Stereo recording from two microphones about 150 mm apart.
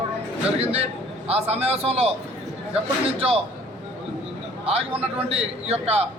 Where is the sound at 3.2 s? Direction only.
40° right (ahead or behind).